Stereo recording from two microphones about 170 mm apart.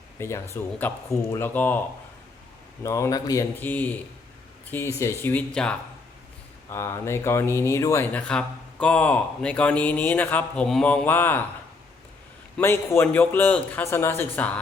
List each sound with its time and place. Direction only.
0.2 s speech: 15° left (ahead or behind)
2.8 s speech: 15° left (ahead or behind)
3.6 s speech: 10° left (ahead or behind)
6.7 s speech: 15° left (ahead or behind)
8.1 s speech: 5° left (ahead or behind)
12.5 s speech: 15° left (ahead or behind)